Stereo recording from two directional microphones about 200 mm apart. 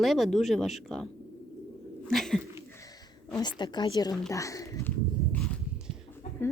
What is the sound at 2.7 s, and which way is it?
Bird, 15° left (ahead or behind).